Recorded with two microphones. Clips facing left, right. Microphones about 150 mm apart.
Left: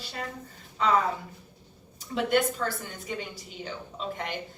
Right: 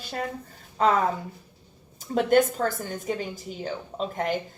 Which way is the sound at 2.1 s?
45° right (ahead or behind).